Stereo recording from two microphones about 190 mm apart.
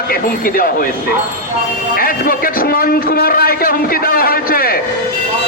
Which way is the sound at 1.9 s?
50° left (ahead or behind).